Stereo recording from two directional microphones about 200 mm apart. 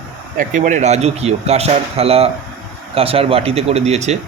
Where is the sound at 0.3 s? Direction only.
40° right (ahead or behind).